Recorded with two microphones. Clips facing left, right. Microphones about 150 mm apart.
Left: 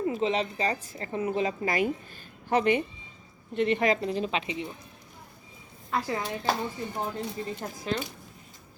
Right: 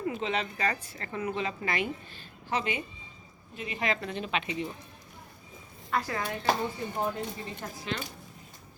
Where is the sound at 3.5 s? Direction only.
65° left (ahead or behind).